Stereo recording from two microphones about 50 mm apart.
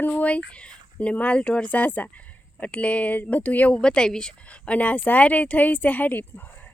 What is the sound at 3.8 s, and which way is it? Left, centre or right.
A woman's voice, centre.